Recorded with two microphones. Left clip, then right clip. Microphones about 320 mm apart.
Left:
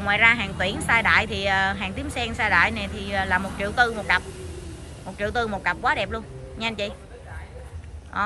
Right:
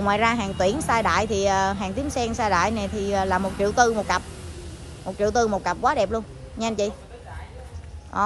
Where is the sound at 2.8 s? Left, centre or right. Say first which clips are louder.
Right 5 dB; right.